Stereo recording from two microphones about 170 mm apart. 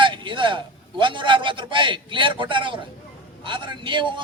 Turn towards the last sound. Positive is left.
turn(degrees=-30)  # may be behind; listen again after turning